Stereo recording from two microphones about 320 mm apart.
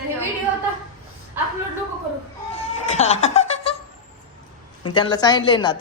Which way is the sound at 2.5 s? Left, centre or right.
Centre.